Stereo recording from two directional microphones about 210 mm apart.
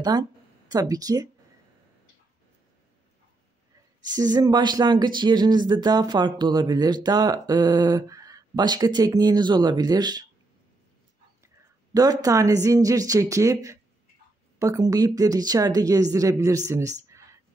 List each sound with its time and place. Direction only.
0.1 s speech: 20° right (ahead or behind)
4.2 s speech: 20° right (ahead or behind)
11.4 s a woman's voice: 15° right (ahead or behind)